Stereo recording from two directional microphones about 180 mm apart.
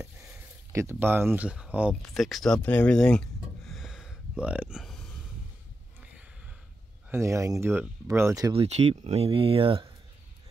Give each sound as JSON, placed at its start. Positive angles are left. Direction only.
{"t": 0.7, "sound": "speech", "side_deg": -15}
{"t": 7.1, "sound": "speech", "side_deg": -15}
{"t": 8.5, "sound": "speech", "side_deg": -35}